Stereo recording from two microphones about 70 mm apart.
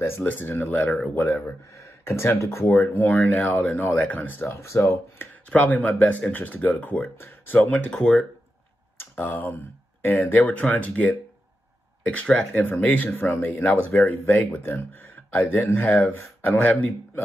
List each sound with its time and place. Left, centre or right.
0.2 s speech: left
1.1 s speech: left
5.5 s speech: left
7.9 s speech: centre
8.9 s tick-tock: left
10.0 s speech: left